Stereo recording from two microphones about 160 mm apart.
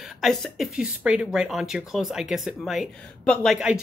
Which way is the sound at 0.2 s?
Centre (ahead or behind).